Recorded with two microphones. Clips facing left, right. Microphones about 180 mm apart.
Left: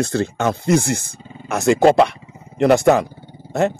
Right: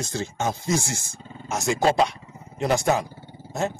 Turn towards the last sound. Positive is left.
turn(degrees=65)  # may be behind; listen again after turning